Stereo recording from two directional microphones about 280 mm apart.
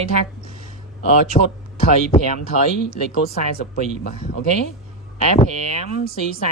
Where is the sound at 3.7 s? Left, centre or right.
Left.